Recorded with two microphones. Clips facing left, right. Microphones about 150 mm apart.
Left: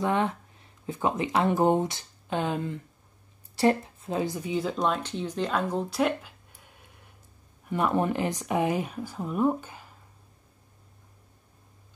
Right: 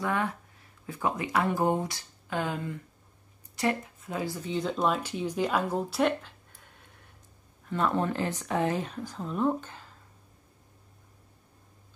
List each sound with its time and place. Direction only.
0.0 s speech: 20° left (ahead or behind)
4.4 s speech: 5° left (ahead or behind)